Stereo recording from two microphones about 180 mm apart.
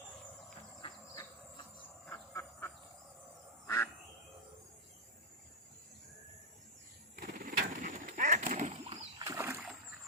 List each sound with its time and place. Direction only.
0.8 s train: 25° left (ahead or behind)
2.0 s frog: 15° left (ahead or behind)
7.2 s a sound: 50° right (ahead or behind)
9.1 s splash: 20° right (ahead or behind)